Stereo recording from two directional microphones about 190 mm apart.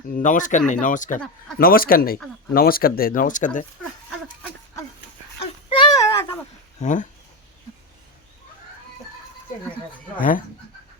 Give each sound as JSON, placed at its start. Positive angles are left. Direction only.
{"t": 0.2, "sound": "speech", "side_deg": 40}
{"t": 5.4, "sound": "a sound", "side_deg": 30}
{"t": 6.7, "sound": "speech", "side_deg": 40}
{"t": 10.2, "sound": "speech", "side_deg": 45}